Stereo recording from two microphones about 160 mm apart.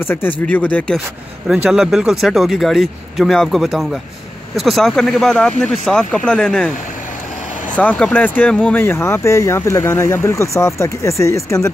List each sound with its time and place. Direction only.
0.0 s speech: 10° left (ahead or behind)
1.5 s speech: 5° right (ahead or behind)
7.7 s speech: 10° left (ahead or behind)